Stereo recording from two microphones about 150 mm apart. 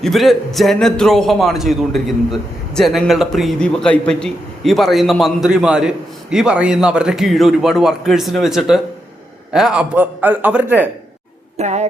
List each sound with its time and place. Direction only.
0.0 s a man's voice: centre (ahead or behind)
11.5 s speech: 50° right (ahead or behind)